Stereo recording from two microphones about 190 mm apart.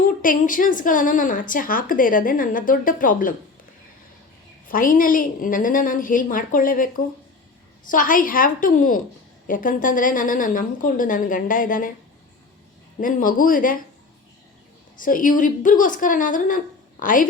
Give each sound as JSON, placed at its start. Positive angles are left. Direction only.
{"t": 0.2, "sound": "a woman's voice", "side_deg": 45}
{"t": 4.7, "sound": "a woman's voice", "side_deg": 45}
{"t": 13.0, "sound": "a woman's voice", "side_deg": 45}
{"t": 14.9, "sound": "a woman's voice", "side_deg": 45}